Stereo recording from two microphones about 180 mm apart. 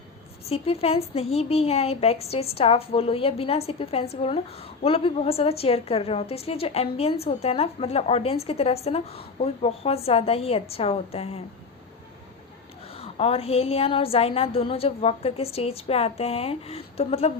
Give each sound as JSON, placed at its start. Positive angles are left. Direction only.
{"t": 0.4, "sound": "a woman's voice", "side_deg": 35}
{"t": 12.9, "sound": "a woman's voice", "side_deg": 30}